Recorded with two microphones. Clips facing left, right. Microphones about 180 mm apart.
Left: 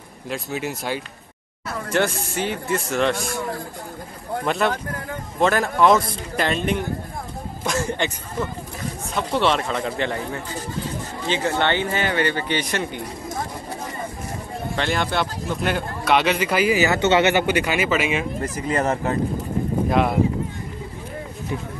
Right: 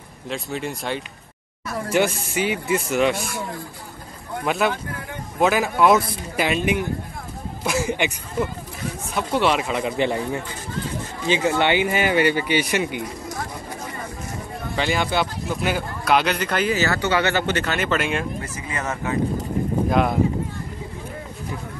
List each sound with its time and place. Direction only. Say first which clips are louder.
0.3 s speech: left 1 dB; 5° left (ahead or behind)
4.5 s speech: right 1 dB; centre (ahead or behind)
14.8 s speech: right 1 dB; 5° right (ahead or behind)
18.7 s speech: left 6 dB; 35° left (ahead or behind)
19.9 s speech: even; centre (ahead or behind)